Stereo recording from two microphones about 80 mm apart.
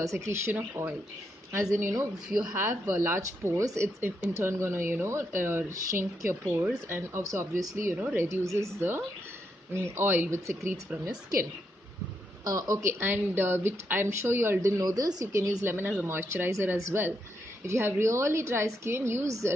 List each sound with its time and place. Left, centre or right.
0.0 s speech: right
1.5 s a woman's voice: right
2.2 s speech: centre
2.5 s speech: right
5.7 s speech: right
8.0 s speech: centre
8.3 s speech: right
12.4 s speech: right
13.0 s speech: right
15.3 s speech: right